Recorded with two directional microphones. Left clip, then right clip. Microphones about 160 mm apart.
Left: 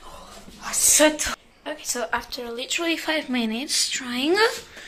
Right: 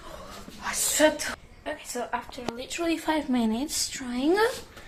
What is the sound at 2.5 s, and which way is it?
A woman's voice, 10° right (ahead or behind).